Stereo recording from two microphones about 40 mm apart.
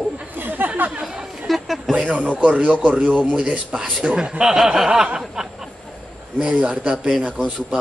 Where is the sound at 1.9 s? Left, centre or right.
Right; by 5.2 s centre.